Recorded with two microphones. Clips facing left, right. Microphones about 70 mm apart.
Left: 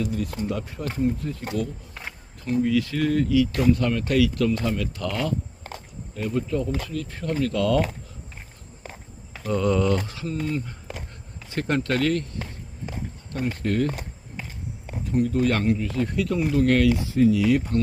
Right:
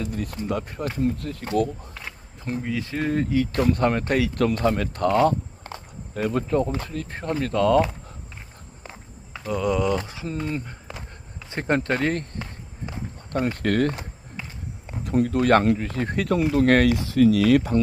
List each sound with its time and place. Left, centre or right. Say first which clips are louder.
0.0 s speech: left 2 dB; right
2.4 s speech: left 6 dB; right
6.1 s speech: right 3 dB; right
6.8 s speech: even; right
9.5 s speech: left 1 dB; centre
11.5 s speech: right 1 dB; right
13.3 s speech: right 3 dB; right
15.0 s speech: right 1 dB; right